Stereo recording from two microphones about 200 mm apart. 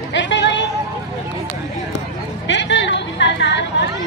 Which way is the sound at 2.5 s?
65° left (ahead or behind).